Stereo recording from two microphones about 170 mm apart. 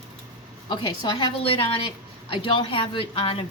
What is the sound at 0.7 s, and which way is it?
A woman's voice, 25° left (ahead or behind).